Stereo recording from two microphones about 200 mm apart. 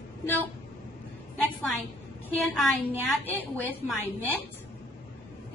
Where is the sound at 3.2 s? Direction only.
10° left (ahead or behind).